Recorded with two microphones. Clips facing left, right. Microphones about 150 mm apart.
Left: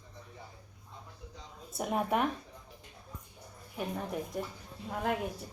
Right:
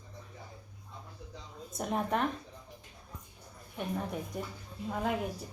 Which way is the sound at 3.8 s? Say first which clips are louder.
Even; 5° left (ahead or behind).